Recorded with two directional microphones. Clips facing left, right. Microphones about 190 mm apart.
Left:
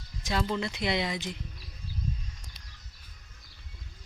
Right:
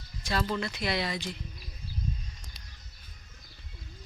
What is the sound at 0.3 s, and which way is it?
Speech, 20° left (ahead or behind).